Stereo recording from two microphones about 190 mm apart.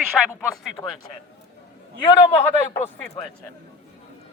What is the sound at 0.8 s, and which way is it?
Speech, 20° left (ahead or behind).